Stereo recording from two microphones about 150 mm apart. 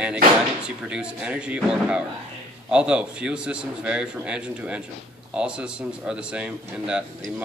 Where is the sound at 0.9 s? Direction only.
5° right (ahead or behind).